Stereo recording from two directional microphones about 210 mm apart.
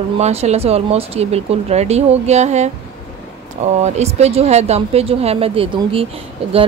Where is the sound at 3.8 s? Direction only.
30° right (ahead or behind).